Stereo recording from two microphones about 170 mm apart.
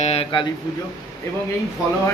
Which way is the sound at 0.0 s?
35° left (ahead or behind).